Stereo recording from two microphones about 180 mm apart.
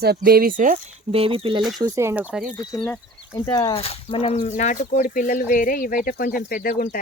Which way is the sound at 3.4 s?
20° left (ahead or behind).